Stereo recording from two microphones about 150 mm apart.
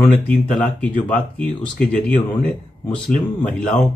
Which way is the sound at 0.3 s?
10° left (ahead or behind).